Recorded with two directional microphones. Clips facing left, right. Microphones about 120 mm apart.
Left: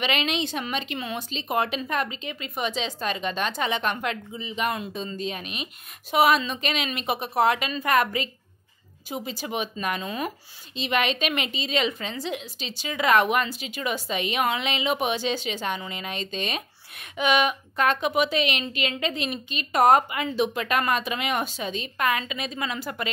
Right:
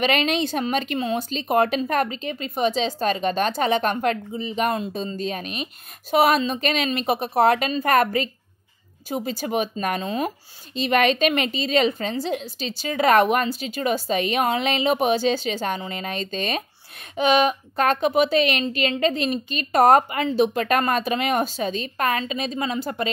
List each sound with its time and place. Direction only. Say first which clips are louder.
0.0 s a woman's voice: right 5 dB; 45° right (ahead or behind)